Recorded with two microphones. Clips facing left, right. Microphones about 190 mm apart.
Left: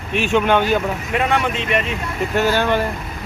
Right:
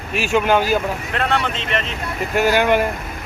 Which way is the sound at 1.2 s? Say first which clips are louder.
Left 3 dB; 10° left (ahead or behind).